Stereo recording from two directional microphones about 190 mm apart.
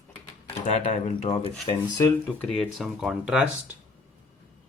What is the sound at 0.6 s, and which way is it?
Speech, 40° left (ahead or behind).